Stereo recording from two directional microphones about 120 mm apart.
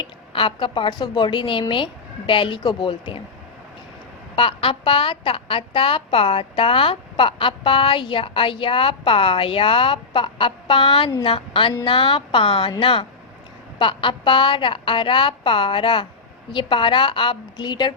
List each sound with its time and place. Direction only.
0.0 s a woman's voice: 45° left (ahead or behind)
4.4 s a woman's voice: 50° left (ahead or behind)